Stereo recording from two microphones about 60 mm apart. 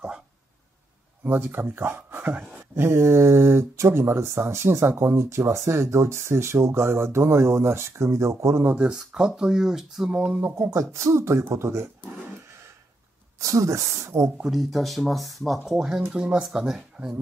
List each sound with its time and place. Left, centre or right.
1.2 s speech: right
2.7 s speech: right
8.7 s speech: centre
10.6 s speech: right
13.4 s speech: right
14.4 s speech: centre